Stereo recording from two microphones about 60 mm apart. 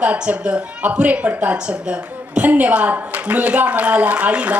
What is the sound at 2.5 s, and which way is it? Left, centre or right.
A woman's voice, right.